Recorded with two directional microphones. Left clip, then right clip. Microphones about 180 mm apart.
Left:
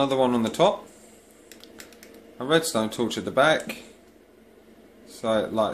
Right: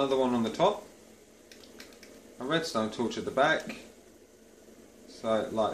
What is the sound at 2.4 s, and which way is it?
Speech, 55° left (ahead or behind).